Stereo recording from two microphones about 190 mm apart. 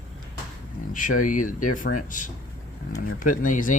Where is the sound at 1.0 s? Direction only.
45° left (ahead or behind).